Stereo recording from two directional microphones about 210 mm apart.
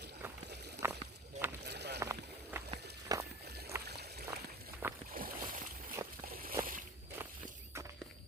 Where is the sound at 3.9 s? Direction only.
50° right (ahead or behind).